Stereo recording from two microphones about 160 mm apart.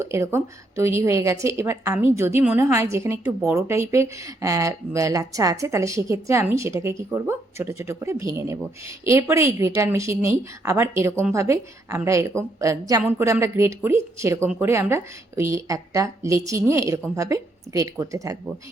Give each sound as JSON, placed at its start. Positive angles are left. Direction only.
{"t": 0.0, "sound": "a woman's voice", "side_deg": -15}